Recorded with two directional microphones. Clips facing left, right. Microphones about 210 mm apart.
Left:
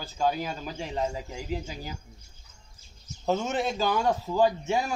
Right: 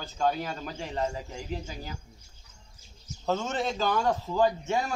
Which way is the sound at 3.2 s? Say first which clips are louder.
Left 2 dB; 15° left (ahead or behind).